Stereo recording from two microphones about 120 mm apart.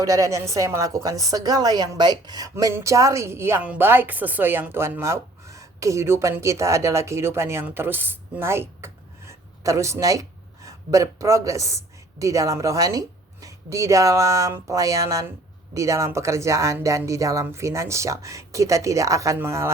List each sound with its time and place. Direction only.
0.0 s a woman's voice: 30° right (ahead or behind)